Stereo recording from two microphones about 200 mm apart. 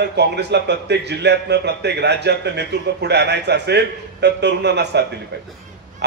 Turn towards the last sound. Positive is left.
turn(degrees=-60)  # may be behind; listen again after turning